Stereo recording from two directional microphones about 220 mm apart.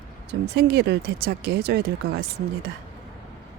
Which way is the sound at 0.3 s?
50° right (ahead or behind).